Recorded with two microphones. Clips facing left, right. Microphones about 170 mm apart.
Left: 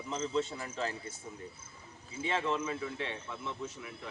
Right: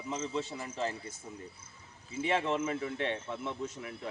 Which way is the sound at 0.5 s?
20° right (ahead or behind).